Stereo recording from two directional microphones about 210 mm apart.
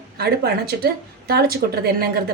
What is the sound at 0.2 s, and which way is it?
A woman's voice, 50° right (ahead or behind).